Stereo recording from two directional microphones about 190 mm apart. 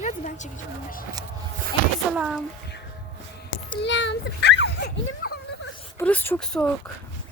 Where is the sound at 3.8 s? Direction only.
70° left (ahead or behind).